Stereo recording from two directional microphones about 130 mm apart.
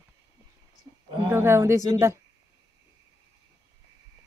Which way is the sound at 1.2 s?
20° right (ahead or behind).